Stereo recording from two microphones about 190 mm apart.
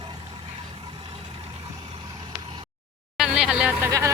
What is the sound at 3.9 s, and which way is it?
Speech, 15° right (ahead or behind).